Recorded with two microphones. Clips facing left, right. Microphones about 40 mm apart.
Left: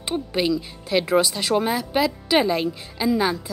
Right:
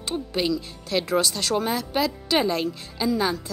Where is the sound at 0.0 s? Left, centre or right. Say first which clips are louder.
Left 3 dB; centre.